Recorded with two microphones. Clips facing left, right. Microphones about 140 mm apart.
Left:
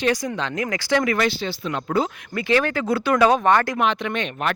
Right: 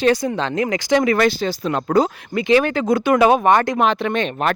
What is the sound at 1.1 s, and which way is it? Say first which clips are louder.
Speech: right 5 dB; 45° right (ahead or behind).